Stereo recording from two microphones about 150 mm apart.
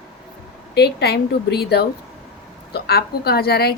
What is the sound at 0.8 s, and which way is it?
A woman's voice, 90° left.